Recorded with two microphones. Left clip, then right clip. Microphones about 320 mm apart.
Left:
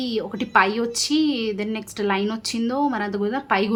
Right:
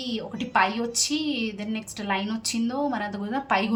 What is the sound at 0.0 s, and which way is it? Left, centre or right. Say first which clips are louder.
A woman's voice: left 6 dB; centre.